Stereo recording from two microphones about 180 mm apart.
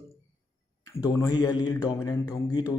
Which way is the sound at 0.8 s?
20° left (ahead or behind).